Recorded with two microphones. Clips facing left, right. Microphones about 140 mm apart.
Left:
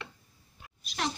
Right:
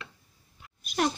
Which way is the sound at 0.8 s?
50° right (ahead or behind).